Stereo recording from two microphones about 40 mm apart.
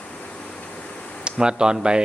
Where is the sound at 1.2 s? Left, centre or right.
Right.